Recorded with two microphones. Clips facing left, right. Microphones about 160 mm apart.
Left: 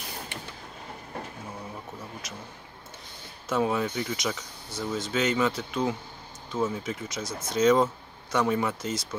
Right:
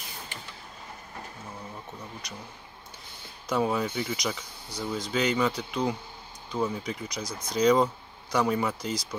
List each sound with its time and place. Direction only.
2.2 s speech: centre (ahead or behind)
3.4 s speech: centre (ahead or behind)
7.2 s speech: 25° left (ahead or behind)
7.5 s speech: centre (ahead or behind)